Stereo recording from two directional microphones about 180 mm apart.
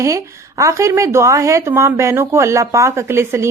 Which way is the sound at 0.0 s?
15° right (ahead or behind).